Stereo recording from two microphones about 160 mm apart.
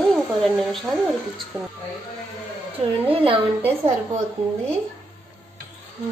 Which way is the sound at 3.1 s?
35° right (ahead or behind).